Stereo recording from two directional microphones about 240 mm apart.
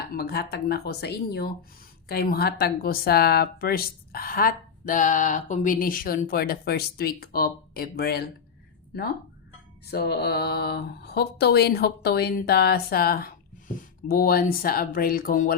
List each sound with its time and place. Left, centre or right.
0.1 s speech: left
9.8 s speech: left